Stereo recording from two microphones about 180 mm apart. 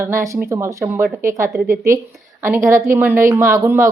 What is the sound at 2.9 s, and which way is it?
Speech, 10° right (ahead or behind).